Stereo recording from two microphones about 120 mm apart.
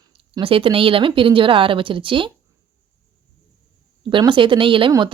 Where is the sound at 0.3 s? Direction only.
50° right (ahead or behind).